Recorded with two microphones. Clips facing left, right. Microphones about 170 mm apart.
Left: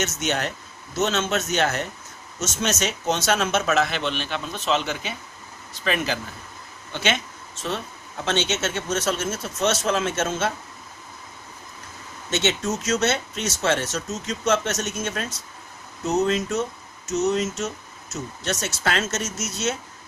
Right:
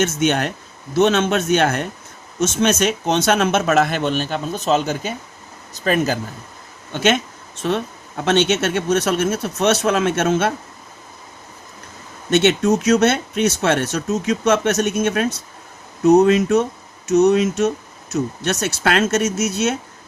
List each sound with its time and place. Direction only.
0.0 s a man's voice: 55° right (ahead or behind)
12.3 s speech: 60° right (ahead or behind)